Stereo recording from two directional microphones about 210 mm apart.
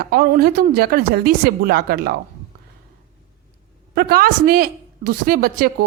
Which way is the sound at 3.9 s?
45° right (ahead or behind).